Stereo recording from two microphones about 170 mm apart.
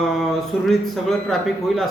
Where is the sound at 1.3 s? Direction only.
Centre (ahead or behind).